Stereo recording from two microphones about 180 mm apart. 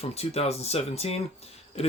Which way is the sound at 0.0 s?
35° left (ahead or behind).